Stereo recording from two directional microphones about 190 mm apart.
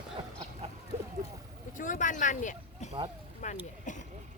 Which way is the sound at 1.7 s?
45° left (ahead or behind).